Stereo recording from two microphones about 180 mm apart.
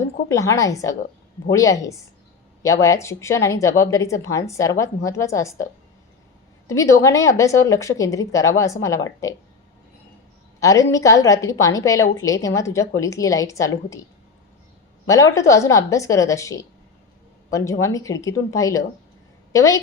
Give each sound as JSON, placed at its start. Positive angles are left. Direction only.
{"t": 0.3, "sound": "speech", "side_deg": 15}
{"t": 6.7, "sound": "speech", "side_deg": 15}
{"t": 10.6, "sound": "a woman's voice", "side_deg": 15}
{"t": 15.0, "sound": "speech", "side_deg": 15}